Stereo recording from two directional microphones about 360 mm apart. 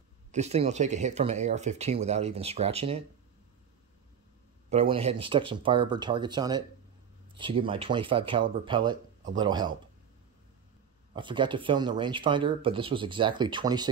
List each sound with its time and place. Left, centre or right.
0.3 s speech: centre
4.6 s speech: centre
11.1 s speech: centre